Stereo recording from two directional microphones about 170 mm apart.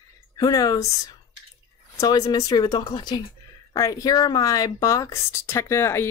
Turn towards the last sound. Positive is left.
turn(degrees=15)  # may be behind; listen again after turning